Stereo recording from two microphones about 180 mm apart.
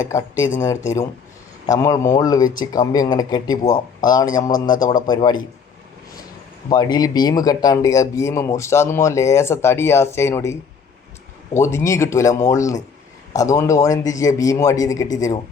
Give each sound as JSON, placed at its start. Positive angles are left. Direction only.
{"t": 0.6, "sound": "a man's voice", "side_deg": 15}
{"t": 4.5, "sound": "a man's voice", "side_deg": 50}
{"t": 5.0, "sound": "a man's voice", "side_deg": 25}
{"t": 6.7, "sound": "a man's voice", "side_deg": 20}